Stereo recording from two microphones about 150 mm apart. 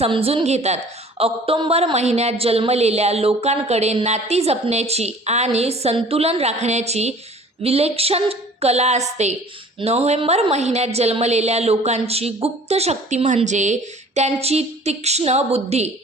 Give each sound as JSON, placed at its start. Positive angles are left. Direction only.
{"t": 0.0, "sound": "a woman's voice", "side_deg": -40}
{"t": 1.2, "sound": "a woman's voice", "side_deg": -35}